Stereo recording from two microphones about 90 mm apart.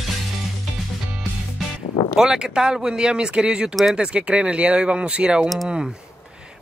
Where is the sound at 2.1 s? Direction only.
10° right (ahead or behind).